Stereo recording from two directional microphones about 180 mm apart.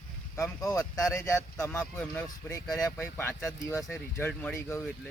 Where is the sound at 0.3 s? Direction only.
15° left (ahead or behind).